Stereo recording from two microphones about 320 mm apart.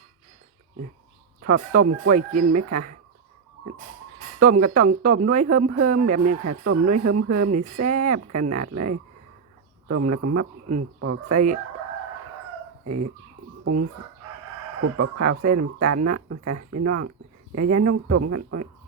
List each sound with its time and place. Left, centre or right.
1.4 s speech: right
4.4 s speech: right
12.8 s speech: right
14.8 s speech: right